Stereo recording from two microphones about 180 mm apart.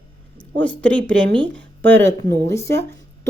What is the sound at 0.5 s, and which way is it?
A woman's voice, 5° left (ahead or behind).